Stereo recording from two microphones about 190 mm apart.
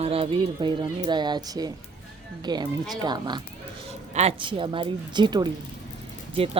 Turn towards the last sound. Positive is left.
turn(degrees=-30)  # may be behind; listen again after turning